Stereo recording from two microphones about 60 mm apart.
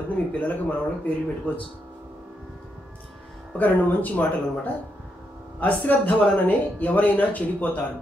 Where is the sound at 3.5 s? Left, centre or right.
Left.